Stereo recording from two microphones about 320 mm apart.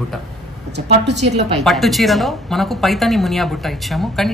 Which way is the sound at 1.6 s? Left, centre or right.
Centre.